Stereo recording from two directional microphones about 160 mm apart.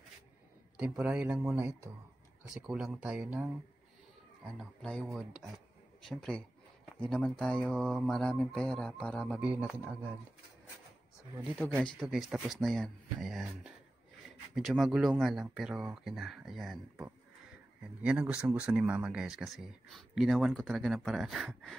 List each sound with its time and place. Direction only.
0.7 s speech: 5° right (ahead or behind)
2.5 s speech: 5° right (ahead or behind)
4.5 s speech: 5° left (ahead or behind)
9.4 s speech: 10° right (ahead or behind)
12.0 s speech: centre (ahead or behind)
18.0 s speech: 5° right (ahead or behind)